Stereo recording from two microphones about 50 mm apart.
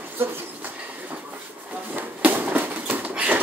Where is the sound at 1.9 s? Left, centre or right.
Right.